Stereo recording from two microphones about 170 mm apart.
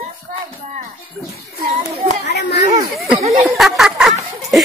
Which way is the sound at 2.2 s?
85° left.